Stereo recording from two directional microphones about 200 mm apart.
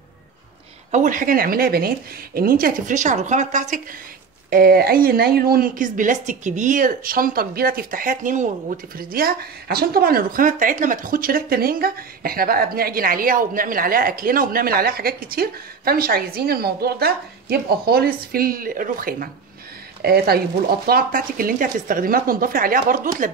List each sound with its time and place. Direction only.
0.9 s a woman's voice: 40° right (ahead or behind)
4.5 s a woman's voice: 50° right (ahead or behind)